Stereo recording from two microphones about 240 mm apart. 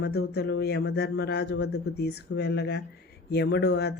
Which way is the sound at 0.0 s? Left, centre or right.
Left.